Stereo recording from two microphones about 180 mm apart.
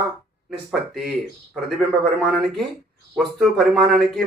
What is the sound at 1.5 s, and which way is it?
Speech, centre (ahead or behind).